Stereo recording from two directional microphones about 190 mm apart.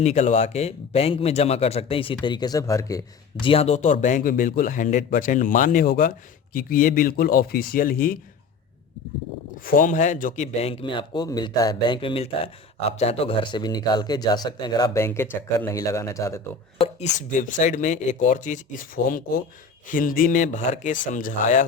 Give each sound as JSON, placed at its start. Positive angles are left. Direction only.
{"t": 0.0, "sound": "speech", "side_deg": 35}
{"t": 3.4, "sound": "speech", "side_deg": 30}
{"t": 9.6, "sound": "speech", "side_deg": 45}
{"t": 16.8, "sound": "speech", "side_deg": 40}